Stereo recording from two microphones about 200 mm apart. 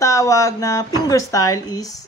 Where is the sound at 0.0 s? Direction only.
15° left (ahead or behind).